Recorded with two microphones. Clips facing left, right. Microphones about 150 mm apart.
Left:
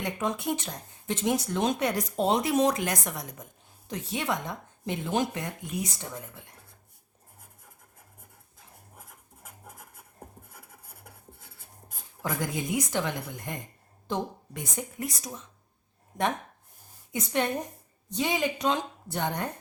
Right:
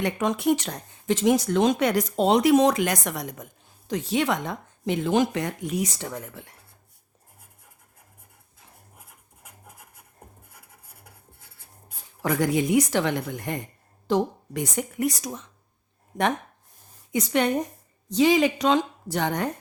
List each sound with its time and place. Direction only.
0.0 s speech: 80° right
12.2 s a woman's voice: 80° right
17.1 s speech: 90° right